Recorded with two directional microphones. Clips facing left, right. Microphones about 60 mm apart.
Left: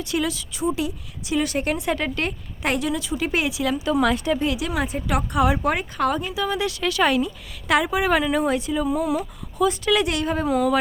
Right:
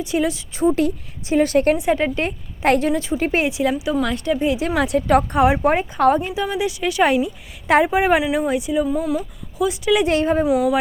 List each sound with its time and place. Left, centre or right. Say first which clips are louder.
0.0 s speech: right 4 dB; right
0.8 s speech: right 7 dB; right
1.7 s speech: right 5 dB; right
2.6 s speech: right 6 dB; right
3.9 s speech: even; centre
4.4 s speech: right 4 dB; right
4.8 s speech: right 7 dB; right
5.0 s speech: right 8 dB; right
5.4 s speech: right 5 dB; right
8.2 s speech: right 1 dB; centre
10.1 s speech: right 6 dB; right
10.4 s speech: right 3 dB; centre